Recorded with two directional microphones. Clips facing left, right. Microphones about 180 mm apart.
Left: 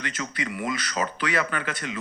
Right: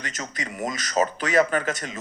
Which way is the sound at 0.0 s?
45° right (ahead or behind).